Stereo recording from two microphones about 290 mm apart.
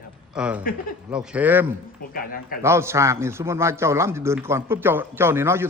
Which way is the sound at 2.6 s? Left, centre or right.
Centre.